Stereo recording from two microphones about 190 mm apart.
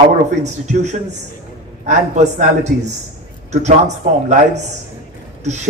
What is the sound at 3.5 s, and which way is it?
Speech, 35° right (ahead or behind).